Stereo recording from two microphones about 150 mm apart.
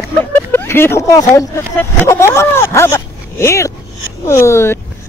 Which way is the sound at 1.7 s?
20° left (ahead or behind).